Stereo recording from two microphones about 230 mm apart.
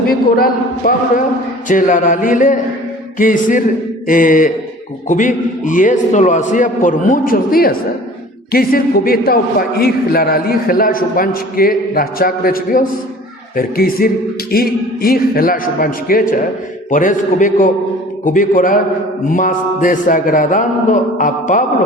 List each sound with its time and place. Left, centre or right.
0.1 s a man's voice: left